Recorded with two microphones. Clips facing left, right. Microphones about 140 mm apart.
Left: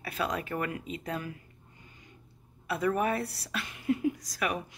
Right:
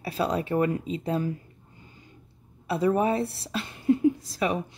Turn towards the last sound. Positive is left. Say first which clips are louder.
# right 5 dB
turn(degrees=-25)  # may be behind; listen again after turning